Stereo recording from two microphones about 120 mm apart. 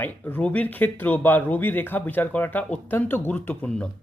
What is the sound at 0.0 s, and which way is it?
Speech, 15° left (ahead or behind).